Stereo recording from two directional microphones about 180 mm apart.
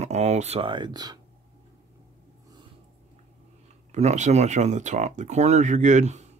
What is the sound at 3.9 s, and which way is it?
Speech, 40° right (ahead or behind).